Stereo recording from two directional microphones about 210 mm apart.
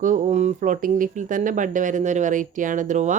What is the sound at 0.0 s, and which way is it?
Speech, 35° right (ahead or behind).